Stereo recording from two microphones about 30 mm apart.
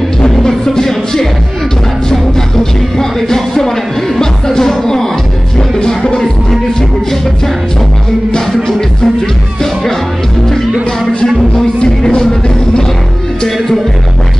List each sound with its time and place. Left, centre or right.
0.3 s music: centre
3.0 s music: centre
8.5 s music: centre
11.8 s music: left